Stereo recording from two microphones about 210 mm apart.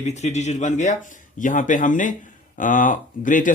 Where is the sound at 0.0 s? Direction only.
30° left (ahead or behind).